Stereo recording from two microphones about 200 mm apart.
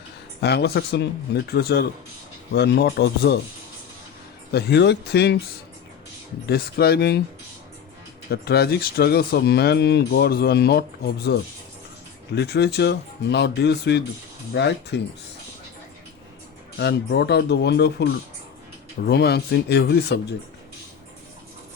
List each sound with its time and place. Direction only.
0.4 s speech: 55° left (ahead or behind)
4.5 s speech: 60° left (ahead or behind)
6.5 s speech: 50° left (ahead or behind)
8.3 s speech: 50° left (ahead or behind)
16.7 s speech: 60° left (ahead or behind)